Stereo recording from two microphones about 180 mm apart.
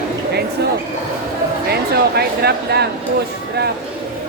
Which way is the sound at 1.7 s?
60° right (ahead or behind).